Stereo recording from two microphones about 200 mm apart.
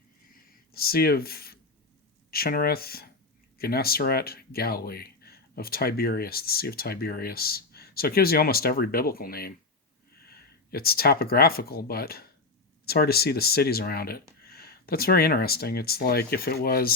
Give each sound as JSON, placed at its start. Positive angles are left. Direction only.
{"t": 0.7, "sound": "speech", "side_deg": 50}